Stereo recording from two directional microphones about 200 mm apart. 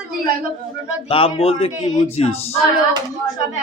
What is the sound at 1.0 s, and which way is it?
Speech, 25° left (ahead or behind).